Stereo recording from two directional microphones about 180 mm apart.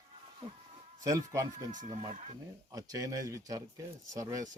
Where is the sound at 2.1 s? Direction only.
40° right (ahead or behind).